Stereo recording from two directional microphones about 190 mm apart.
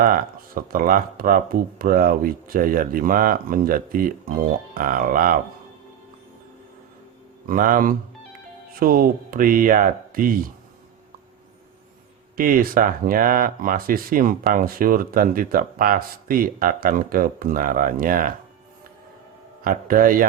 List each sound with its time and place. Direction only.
0.0 s speech: 50° right (ahead or behind)
7.4 s speech: 45° right (ahead or behind)
12.4 s speech: 50° right (ahead or behind)
19.6 s speech: 45° right (ahead or behind)